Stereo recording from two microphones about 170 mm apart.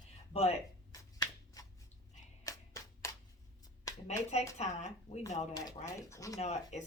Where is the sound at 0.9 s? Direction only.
20° left (ahead or behind).